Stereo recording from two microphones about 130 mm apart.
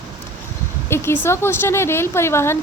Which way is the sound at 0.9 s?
20° left (ahead or behind).